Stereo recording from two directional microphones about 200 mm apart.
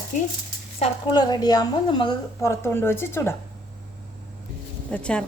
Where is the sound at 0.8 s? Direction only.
20° left (ahead or behind).